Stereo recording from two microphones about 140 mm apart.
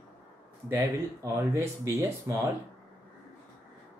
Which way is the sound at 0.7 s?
20° right (ahead or behind).